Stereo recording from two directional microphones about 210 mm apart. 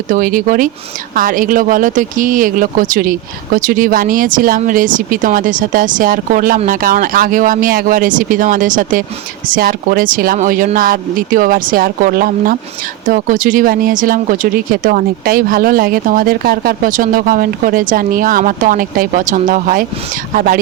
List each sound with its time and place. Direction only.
0.1 s speech: 40° right (ahead or behind)